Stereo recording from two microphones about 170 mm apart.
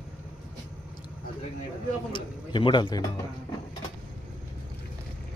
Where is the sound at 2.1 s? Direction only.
30° left (ahead or behind).